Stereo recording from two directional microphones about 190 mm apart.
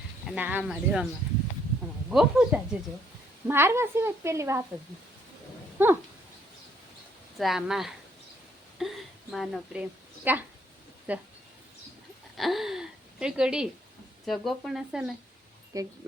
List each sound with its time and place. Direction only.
0.3 s speech: 10° right (ahead or behind)
2.0 s a woman's voice: 5° right (ahead or behind)
5.8 s speech: 10° right (ahead or behind)
7.3 s speech: centre (ahead or behind)
8.8 s a sound: centre (ahead or behind)
10.3 s a woman's voice: 10° right (ahead or behind)
12.4 s gasp: centre (ahead or behind)
14.3 s speech: centre (ahead or behind)
15.7 s a woman's voice: 20° right (ahead or behind)